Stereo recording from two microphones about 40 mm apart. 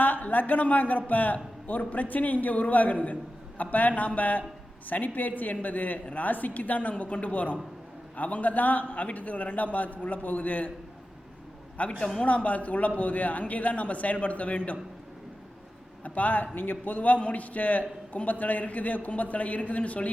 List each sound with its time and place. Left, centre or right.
0.0 s a man's voice: left
11.8 s a man's voice: left
16.0 s a man's voice: left